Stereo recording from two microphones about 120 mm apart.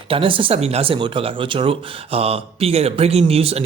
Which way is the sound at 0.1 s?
45° right (ahead or behind).